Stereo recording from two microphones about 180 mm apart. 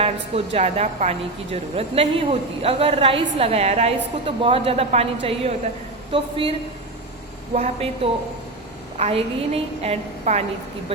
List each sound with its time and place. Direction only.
0.0 s a woman's voice: 35° right (ahead or behind)